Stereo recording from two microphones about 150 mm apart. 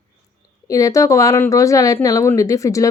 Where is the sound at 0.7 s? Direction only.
25° left (ahead or behind).